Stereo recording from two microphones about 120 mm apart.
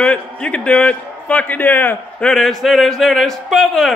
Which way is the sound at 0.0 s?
10° left (ahead or behind).